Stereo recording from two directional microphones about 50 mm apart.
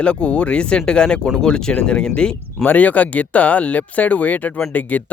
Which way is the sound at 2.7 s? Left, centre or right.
Left.